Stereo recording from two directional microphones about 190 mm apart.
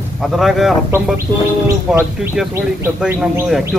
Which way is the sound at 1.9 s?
10° right (ahead or behind).